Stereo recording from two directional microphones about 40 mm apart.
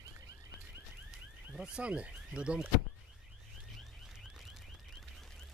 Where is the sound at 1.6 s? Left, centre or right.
Right.